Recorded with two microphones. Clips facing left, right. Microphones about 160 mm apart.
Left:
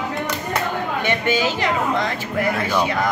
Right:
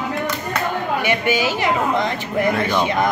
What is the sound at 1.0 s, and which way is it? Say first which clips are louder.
Speech: even; 10° right (ahead or behind).